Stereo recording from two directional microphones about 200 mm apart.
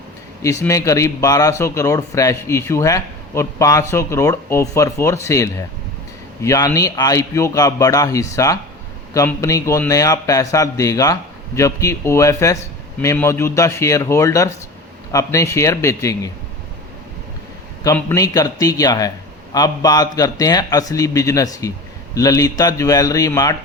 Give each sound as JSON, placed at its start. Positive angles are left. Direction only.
{"t": 0.4, "sound": "speech", "side_deg": 15}
{"t": 17.8, "sound": "speech", "side_deg": 15}